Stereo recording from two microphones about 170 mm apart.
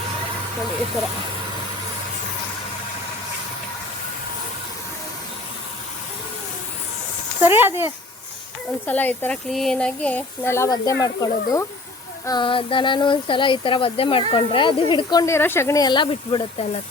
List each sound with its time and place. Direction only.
7.4 s speech: 15° right (ahead or behind)
8.9 s speech: 10° left (ahead or behind); by 16.6 s 30° left (ahead or behind)